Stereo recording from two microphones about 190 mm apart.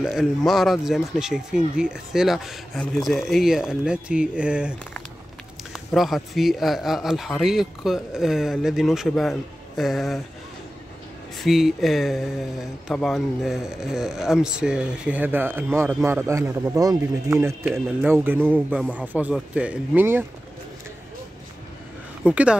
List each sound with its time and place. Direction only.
0.0 s speech: centre (ahead or behind)
5.9 s speech: centre (ahead or behind)
11.3 s speech: centre (ahead or behind)
22.2 s speech: 5° right (ahead or behind)